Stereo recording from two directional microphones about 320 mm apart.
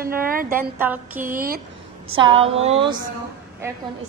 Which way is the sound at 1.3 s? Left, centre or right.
Right.